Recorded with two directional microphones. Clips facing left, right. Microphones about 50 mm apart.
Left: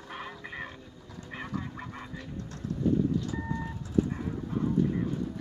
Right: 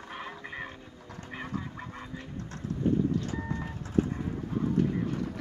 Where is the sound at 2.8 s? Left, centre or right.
Right.